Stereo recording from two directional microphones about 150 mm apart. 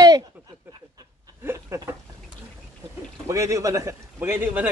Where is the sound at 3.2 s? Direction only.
20° right (ahead or behind).